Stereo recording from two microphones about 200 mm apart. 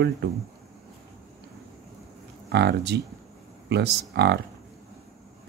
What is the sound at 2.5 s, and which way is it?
Speech, 55° right (ahead or behind).